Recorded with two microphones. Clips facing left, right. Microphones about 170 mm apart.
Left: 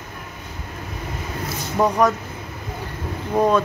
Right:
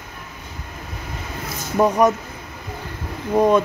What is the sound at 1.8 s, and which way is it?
Speech, 20° right (ahead or behind).